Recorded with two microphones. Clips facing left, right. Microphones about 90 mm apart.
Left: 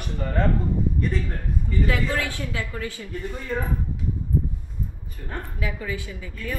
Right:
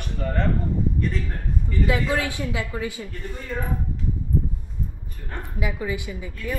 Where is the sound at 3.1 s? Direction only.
5° left (ahead or behind).